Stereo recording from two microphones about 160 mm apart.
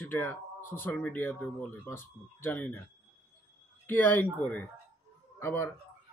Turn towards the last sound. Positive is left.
turn(degrees=15)  # may be behind; listen again after turning